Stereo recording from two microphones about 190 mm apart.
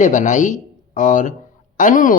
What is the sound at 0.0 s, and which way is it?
Speech, 40° left (ahead or behind).